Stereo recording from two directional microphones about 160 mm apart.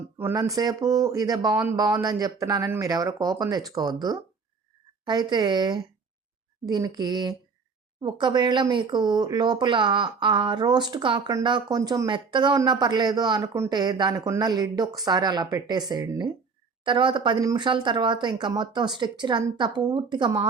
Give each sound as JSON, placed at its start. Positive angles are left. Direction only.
{"t": 0.2, "sound": "speech", "side_deg": -20}
{"t": 5.0, "sound": "speech", "side_deg": -25}